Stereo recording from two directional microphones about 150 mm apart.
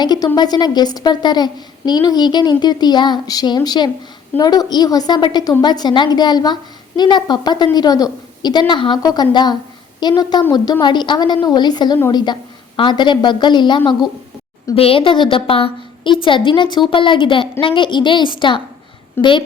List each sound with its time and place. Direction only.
0.0 s a woman's voice: 25° left (ahead or behind)